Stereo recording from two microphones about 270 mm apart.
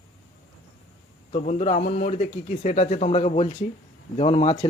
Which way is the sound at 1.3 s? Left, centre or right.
Left.